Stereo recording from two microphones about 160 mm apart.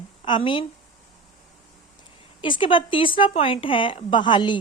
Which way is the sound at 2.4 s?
30° left (ahead or behind).